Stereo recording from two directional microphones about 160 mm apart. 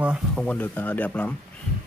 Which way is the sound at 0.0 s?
5° right (ahead or behind).